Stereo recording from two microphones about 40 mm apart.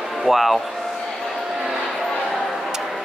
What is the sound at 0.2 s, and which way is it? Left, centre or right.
Speech, centre.